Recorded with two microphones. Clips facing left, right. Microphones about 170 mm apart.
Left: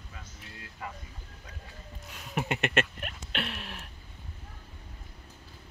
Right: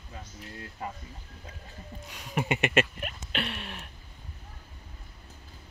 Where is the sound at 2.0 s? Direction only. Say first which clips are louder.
Right 2 dB; centre (ahead or behind).